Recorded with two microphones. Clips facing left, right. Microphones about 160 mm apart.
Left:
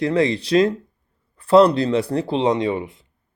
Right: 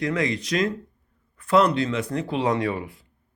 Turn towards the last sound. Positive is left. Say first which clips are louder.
# left 4 dB
turn(degrees=20)  # may be behind; listen again after turning